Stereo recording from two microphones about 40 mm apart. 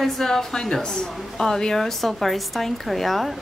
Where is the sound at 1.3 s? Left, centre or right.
Centre.